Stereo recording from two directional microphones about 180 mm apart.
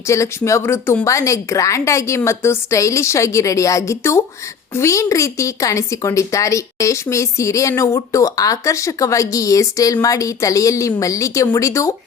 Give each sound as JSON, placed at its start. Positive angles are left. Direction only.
{"t": 0.1, "sound": "a woman's voice", "side_deg": 15}